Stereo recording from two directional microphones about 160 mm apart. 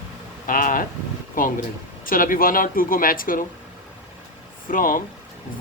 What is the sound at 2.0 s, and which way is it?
Speech, 60° left (ahead or behind).